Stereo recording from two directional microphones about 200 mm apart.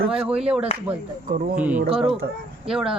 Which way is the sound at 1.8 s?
30° right (ahead or behind).